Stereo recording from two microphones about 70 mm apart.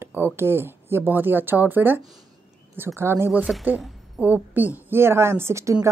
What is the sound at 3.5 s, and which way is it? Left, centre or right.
A woman's voice, centre.